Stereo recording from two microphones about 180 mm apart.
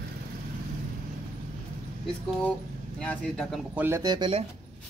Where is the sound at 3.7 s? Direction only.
10° right (ahead or behind).